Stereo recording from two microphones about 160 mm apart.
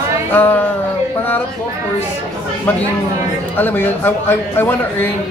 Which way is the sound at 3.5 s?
10° left (ahead or behind).